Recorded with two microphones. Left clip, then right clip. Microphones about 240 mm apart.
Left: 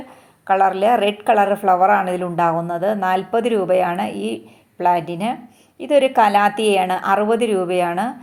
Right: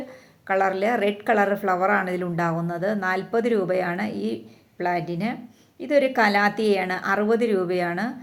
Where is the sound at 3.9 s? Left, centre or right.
Centre.